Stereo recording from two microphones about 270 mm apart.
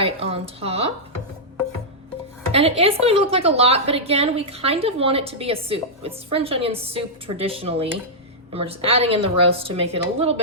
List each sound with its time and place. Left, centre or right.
0.0 s a woman's voice: right
2.5 s a woman's voice: right